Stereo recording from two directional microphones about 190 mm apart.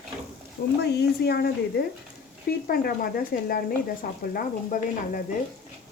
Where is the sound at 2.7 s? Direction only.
50° left (ahead or behind).